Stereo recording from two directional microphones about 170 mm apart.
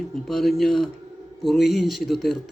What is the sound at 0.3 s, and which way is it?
A man's voice, centre (ahead or behind).